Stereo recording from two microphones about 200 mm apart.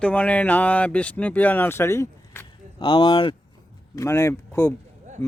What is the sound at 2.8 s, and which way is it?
Speech, 25° left (ahead or behind).